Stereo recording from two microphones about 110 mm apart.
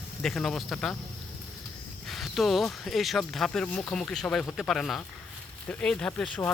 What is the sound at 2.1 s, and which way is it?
Speech, centre (ahead or behind).